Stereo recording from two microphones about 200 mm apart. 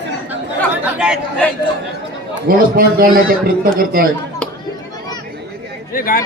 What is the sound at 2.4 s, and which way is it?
A man's voice, 50° right (ahead or behind).